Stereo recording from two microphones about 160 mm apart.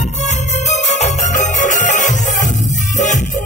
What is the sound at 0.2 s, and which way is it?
Music, 45° left (ahead or behind).